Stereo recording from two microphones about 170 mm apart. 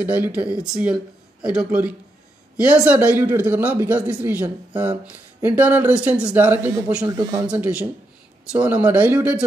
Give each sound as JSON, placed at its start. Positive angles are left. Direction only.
{"t": 0.0, "sound": "speech", "side_deg": -10}
{"t": 7.1, "sound": "speech", "side_deg": -20}
{"t": 7.4, "sound": "speech", "side_deg": -10}